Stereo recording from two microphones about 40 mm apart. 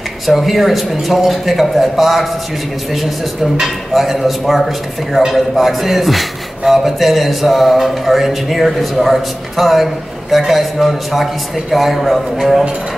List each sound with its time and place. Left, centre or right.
0.3 s a man's voice: centre
3.5 s a man's voice: centre